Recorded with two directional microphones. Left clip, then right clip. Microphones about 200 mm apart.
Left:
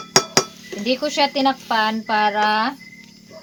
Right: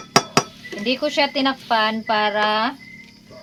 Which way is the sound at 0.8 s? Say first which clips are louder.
Left 1 dB; 20° left (ahead or behind).